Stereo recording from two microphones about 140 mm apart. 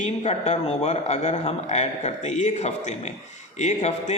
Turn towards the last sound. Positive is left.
turn(degrees=55)  # may be behind; listen again after turning